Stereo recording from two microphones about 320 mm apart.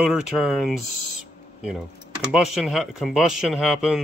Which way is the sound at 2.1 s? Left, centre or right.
Centre.